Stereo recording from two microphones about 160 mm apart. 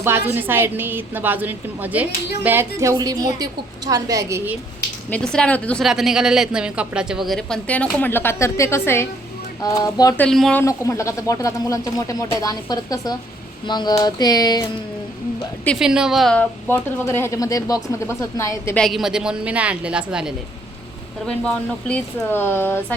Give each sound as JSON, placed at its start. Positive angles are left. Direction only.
{"t": 0.0, "sound": "a woman's voice", "side_deg": -15}
{"t": 5.1, "sound": "speech", "side_deg": 5}
{"t": 5.8, "sound": "a woman's voice", "side_deg": -5}
{"t": 10.2, "sound": "a woman's voice", "side_deg": 5}
{"t": 10.6, "sound": "speech", "side_deg": 20}
{"t": 15.8, "sound": "a woman's voice", "side_deg": -5}
{"t": 18.8, "sound": "a woman's voice", "side_deg": 0}
{"t": 21.2, "sound": "speech", "side_deg": 5}